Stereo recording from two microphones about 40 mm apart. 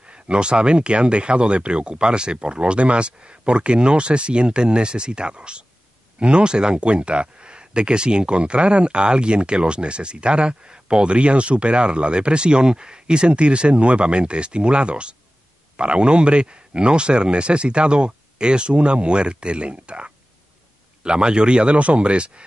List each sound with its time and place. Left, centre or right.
0.0 s speech: right